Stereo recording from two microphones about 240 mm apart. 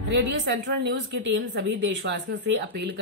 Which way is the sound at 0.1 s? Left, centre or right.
Right.